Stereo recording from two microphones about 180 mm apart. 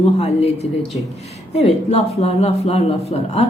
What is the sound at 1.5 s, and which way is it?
Speech, 35° left (ahead or behind).